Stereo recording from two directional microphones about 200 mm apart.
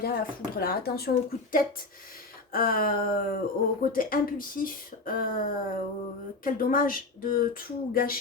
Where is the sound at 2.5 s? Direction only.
45° left (ahead or behind).